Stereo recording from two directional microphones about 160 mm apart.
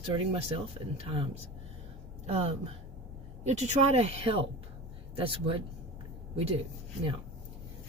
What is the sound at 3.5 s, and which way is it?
Speech, 45° right (ahead or behind).